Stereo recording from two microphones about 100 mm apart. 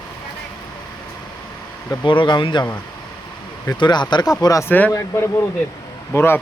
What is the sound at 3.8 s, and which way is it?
Speech, 45° left (ahead or behind).